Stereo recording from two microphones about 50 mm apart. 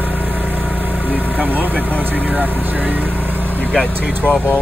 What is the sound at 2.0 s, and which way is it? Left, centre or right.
Speech, right.